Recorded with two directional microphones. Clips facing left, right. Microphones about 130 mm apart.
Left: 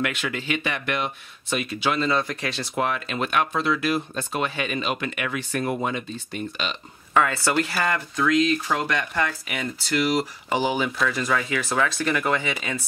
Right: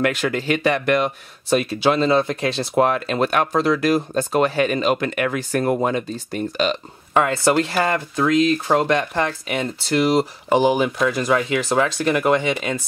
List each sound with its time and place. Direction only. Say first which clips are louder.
0.0 s speech: right 7 dB; 40° right (ahead or behind)
7.2 s speech: right 4 dB; 25° right (ahead or behind)
7.7 s speech: right 5 dB; 35° right (ahead or behind)
11.1 s speech: right 5 dB; 20° right (ahead or behind)